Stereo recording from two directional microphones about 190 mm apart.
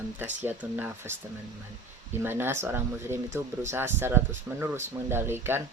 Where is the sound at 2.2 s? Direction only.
10° right (ahead or behind).